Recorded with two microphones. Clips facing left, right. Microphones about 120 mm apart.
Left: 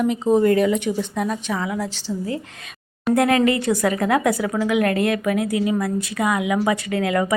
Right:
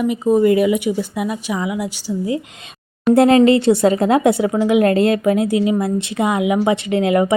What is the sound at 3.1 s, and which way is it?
A woman's voice, 25° right (ahead or behind).